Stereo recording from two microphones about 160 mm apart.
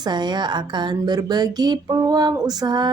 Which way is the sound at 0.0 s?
25° right (ahead or behind).